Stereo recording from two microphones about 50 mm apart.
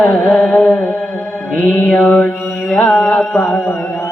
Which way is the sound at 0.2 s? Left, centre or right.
Centre.